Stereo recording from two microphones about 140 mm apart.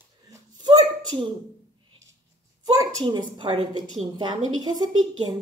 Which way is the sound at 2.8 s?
35° right (ahead or behind).